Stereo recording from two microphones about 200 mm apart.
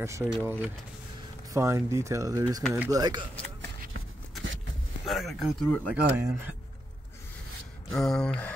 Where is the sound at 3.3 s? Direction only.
5° left (ahead or behind).